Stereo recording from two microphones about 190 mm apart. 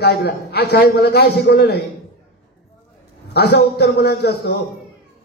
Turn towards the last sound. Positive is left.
turn(degrees=60)  # may be behind; listen again after turning